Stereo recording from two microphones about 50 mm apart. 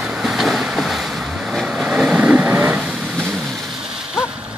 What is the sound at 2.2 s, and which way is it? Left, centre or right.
Vehicle, right.